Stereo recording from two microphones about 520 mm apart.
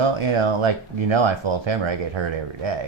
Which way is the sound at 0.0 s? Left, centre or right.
Right.